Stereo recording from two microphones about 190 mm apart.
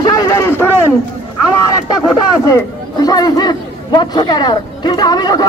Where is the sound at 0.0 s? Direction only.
15° left (ahead or behind).